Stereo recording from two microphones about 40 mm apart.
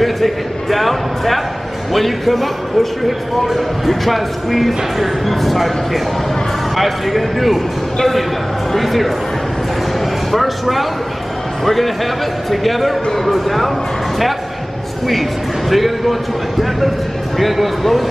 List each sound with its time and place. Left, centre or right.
0.0 s a man's voice: centre
10.3 s speech: centre
15.7 s speech: centre